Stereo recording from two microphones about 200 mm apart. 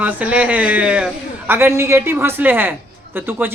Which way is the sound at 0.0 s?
10° right (ahead or behind).